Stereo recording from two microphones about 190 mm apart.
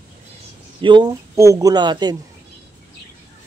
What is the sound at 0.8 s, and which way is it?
Speech, 25° right (ahead or behind).